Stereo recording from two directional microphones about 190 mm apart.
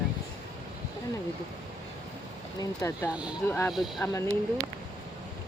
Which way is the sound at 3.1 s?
5° right (ahead or behind).